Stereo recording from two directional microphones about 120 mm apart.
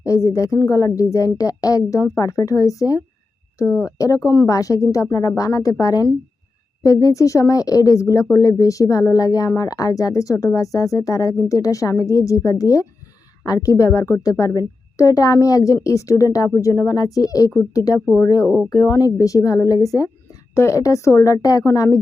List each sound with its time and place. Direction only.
0.0 s speech: 25° left (ahead or behind)
18.4 s speech: 5° right (ahead or behind)
18.7 s speech: 30° left (ahead or behind)